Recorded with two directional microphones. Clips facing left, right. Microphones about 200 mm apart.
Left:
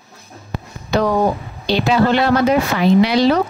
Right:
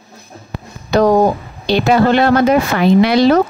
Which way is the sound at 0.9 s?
45° right (ahead or behind).